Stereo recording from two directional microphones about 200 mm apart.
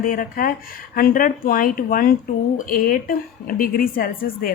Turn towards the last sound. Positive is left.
turn(degrees=45)  # may be behind; listen again after turning